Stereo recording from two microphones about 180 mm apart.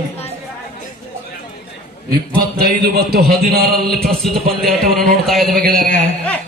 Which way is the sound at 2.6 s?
60° right (ahead or behind).